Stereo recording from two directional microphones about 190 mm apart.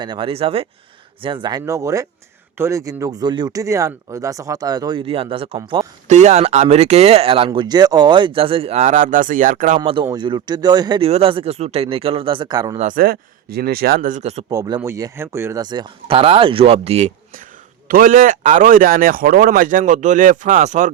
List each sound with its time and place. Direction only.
0.0 s speech: 25° right (ahead or behind)
6.1 s speech: 35° right (ahead or behind)
9.8 s speech: 25° right (ahead or behind)
12.7 s speech: 40° right (ahead or behind)
14.5 s speech: 20° right (ahead or behind)
17.8 s speech: 45° right (ahead or behind)